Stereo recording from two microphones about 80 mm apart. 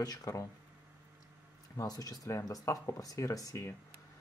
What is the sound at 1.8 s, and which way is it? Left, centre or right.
Speech, left.